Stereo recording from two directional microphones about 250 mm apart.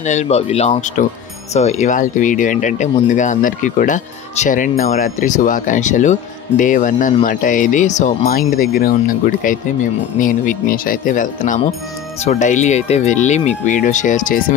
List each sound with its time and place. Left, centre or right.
0.0 s speech: left